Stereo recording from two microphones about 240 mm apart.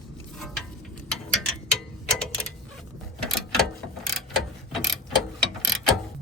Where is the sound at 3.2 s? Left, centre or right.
Centre.